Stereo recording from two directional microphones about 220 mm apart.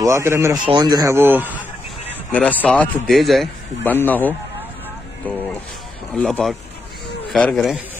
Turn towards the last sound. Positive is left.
turn(degrees=0)  # may be behind; listen again after turning